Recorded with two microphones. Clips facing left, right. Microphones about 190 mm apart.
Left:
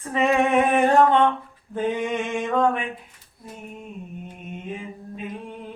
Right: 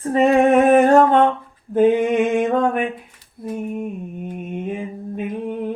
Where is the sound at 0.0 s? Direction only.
35° right (ahead or behind).